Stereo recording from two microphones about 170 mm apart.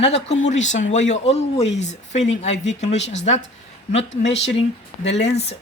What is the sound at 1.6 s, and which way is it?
Speech, 90° left.